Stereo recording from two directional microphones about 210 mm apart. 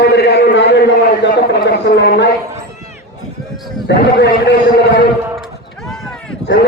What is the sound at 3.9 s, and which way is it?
Speech, 55° left (ahead or behind).